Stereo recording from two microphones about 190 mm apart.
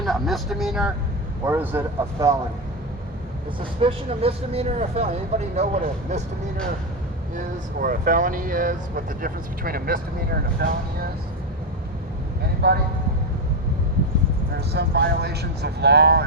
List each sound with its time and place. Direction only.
0.0 s vehicle: centre (ahead or behind)
1.5 s speech: 10° right (ahead or behind)
3.8 s speech: 30° right (ahead or behind)
7.3 s speech: 50° right (ahead or behind)
12.6 s speech: 55° right (ahead or behind)
14.7 s speech: 60° right (ahead or behind)